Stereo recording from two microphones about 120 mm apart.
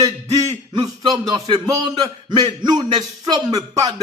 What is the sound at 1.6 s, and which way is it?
A man's voice, 30° right (ahead or behind).